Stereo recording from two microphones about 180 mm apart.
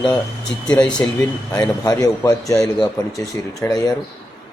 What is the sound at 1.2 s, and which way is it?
A man's voice, 20° left (ahead or behind).